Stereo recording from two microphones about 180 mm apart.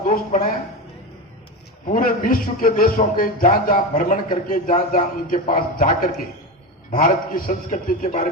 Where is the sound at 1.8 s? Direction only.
50° left (ahead or behind).